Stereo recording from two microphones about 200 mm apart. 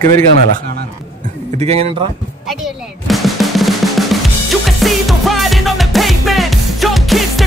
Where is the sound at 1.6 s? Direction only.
30° right (ahead or behind).